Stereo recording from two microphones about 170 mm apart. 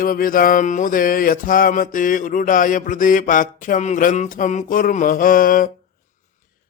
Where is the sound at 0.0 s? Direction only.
55° left (ahead or behind).